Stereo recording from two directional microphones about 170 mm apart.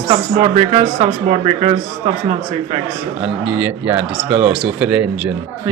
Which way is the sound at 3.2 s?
10° right (ahead or behind).